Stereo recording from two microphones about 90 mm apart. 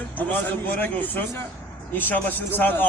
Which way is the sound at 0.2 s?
20° left (ahead or behind).